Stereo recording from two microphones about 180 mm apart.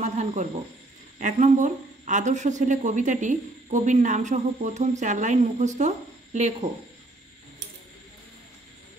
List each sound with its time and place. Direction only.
0.0 s snake: 40° right (ahead or behind)
1.2 s speech: 45° right (ahead or behind)